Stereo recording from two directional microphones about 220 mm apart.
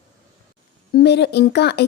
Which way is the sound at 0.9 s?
50° left (ahead or behind).